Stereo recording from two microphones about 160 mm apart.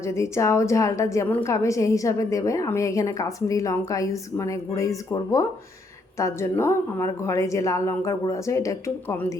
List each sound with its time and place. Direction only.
0.0 s a woman's voice: 20° left (ahead or behind)